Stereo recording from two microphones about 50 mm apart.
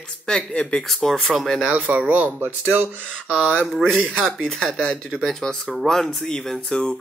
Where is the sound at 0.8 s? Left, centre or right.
Centre.